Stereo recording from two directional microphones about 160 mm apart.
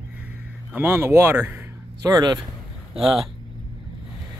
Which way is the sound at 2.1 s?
25° right (ahead or behind).